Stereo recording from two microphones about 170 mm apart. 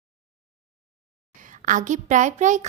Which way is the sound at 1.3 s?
50° right (ahead or behind).